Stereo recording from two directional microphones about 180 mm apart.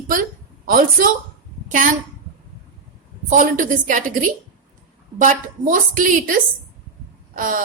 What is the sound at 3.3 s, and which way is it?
A woman's voice, 45° right (ahead or behind).